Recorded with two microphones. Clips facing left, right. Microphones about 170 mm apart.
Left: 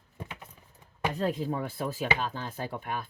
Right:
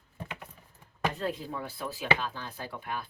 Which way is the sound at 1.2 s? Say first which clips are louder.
Left 4 dB; 45° left (ahead or behind).